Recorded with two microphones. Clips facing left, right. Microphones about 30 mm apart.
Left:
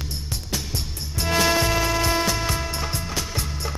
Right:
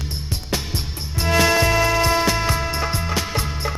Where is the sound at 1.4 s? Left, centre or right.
Centre.